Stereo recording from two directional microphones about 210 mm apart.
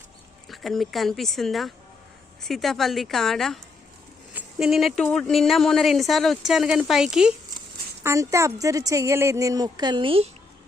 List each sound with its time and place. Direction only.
0.4 s speech: centre (ahead or behind)
8.0 s a woman's voice: 15° right (ahead or behind)